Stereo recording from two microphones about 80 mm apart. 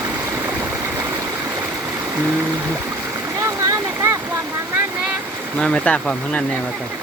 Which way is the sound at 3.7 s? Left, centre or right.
Right.